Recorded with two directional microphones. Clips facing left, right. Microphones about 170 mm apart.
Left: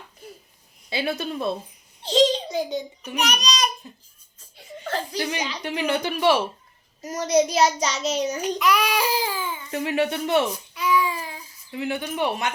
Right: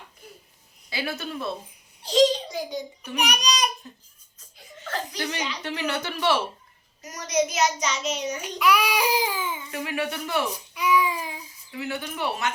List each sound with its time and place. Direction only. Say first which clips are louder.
0.9 s a child's voice: left 5 dB; 25° left (ahead or behind)
3.2 s speech: left 1 dB; 10° right (ahead or behind)
4.4 s laughter: left 7 dB; 30° left (ahead or behind)
5.1 s speech: left 3 dB; 15° left (ahead or behind)
7.0 s child singing: left 5 dB; 30° left (ahead or behind)
8.5 s speech: right 2 dB; 10° right (ahead or behind)
9.7 s a child's voice: left 7 dB; 30° left (ahead or behind)
10.8 s a sound: even; 10° right (ahead or behind)
11.7 s a child's voice: left 4 dB; 20° left (ahead or behind)